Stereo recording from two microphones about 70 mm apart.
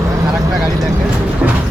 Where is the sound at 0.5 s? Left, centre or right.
Centre.